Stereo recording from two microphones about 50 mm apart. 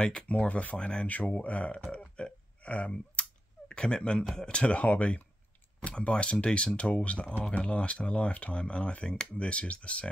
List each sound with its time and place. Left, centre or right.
0.0 s speech: left
1.0 s speech: left
1.9 s a sound: centre
4.4 s speech: left